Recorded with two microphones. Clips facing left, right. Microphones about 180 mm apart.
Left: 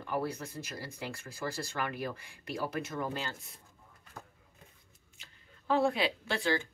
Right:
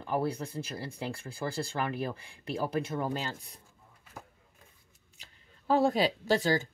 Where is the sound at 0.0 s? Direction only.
30° right (ahead or behind).